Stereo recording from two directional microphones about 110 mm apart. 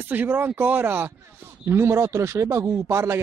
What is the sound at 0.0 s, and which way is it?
A man's voice, 15° right (ahead or behind).